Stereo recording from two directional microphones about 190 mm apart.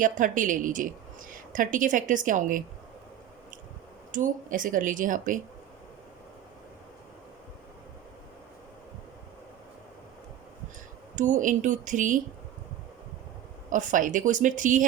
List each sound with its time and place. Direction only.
0.0 s a woman's voice: 45° right (ahead or behind)
4.1 s a woman's voice: 45° right (ahead or behind)
11.1 s speech: 40° right (ahead or behind)
13.7 s a woman's voice: 40° right (ahead or behind)